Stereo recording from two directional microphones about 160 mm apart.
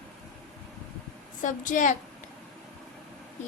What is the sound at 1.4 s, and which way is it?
Speech, 50° left (ahead or behind).